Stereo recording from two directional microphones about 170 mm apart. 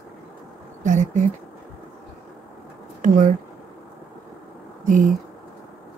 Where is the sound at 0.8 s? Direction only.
45° right (ahead or behind).